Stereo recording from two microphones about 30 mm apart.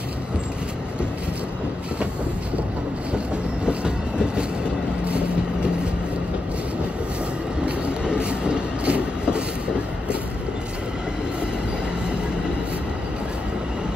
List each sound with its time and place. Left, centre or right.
3.6 s train: right
7.6 s train: right